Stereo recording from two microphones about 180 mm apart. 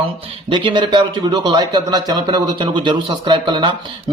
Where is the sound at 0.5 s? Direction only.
25° right (ahead or behind).